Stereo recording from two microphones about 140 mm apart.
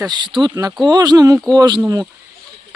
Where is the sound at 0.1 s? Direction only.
35° right (ahead or behind).